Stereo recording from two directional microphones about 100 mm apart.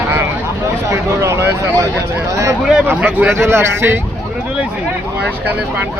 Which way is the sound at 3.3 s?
25° right (ahead or behind).